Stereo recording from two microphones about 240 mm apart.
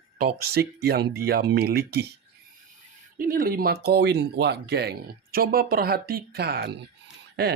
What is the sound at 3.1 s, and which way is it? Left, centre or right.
Speech, right.